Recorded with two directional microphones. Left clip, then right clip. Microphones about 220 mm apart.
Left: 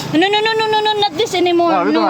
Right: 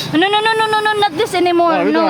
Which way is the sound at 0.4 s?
30° right (ahead or behind).